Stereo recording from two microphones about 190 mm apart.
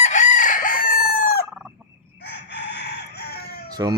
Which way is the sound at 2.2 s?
65° left (ahead or behind).